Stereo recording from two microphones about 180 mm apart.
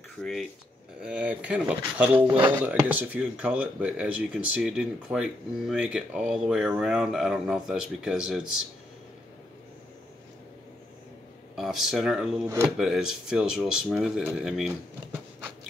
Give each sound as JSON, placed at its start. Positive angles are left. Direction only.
{"t": 0.2, "sound": "speech", "side_deg": 0}
{"t": 11.5, "sound": "speech", "side_deg": 0}